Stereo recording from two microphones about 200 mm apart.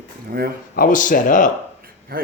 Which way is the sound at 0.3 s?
50° right (ahead or behind).